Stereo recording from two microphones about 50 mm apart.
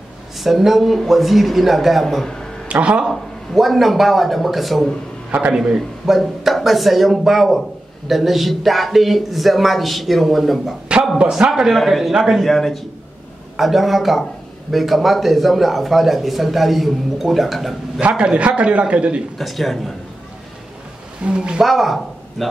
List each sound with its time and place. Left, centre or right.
0.4 s a man's voice: centre
2.7 s a man's voice: right
3.1 s a man's voice: centre
5.5 s speech: centre
5.8 s a man's voice: centre
11.1 s speech: centre
11.7 s a man's voice: centre
18.0 s a man's voice: right
19.3 s a man's voice: centre
21.2 s a man's voice: centre
21.6 s speech: centre